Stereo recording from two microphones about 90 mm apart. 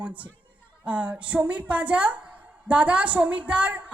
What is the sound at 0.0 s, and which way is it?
A woman's voice, 15° right (ahead or behind).